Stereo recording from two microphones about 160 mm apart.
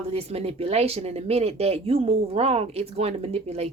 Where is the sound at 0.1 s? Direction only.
40° right (ahead or behind).